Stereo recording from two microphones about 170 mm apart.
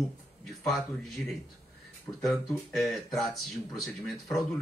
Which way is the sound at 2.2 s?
Centre (ahead or behind).